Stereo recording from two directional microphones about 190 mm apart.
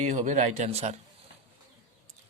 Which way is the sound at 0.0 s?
40° right (ahead or behind).